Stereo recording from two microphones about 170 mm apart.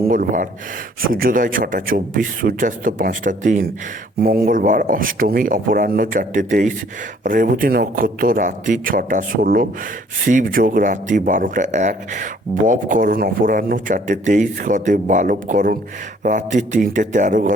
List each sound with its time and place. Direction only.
0.1 s a man's voice: 55° right (ahead or behind)
4.2 s a man's voice: 60° right (ahead or behind)